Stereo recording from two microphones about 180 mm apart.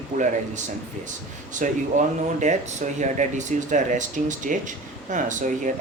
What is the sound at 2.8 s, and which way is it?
Speech, 45° right (ahead or behind).